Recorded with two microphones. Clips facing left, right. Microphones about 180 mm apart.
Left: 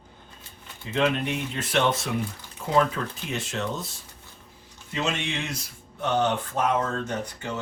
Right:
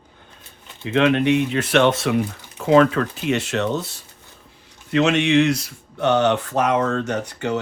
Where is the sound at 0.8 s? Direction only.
70° right (ahead or behind).